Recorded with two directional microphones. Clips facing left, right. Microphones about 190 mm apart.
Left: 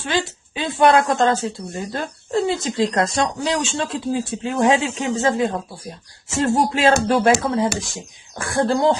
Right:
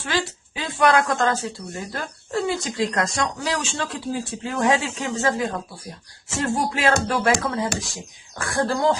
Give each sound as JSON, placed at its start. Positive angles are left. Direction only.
{"t": 0.0, "sound": "speech", "side_deg": 20}